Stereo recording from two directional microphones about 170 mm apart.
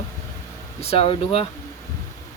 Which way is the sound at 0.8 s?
35° left (ahead or behind).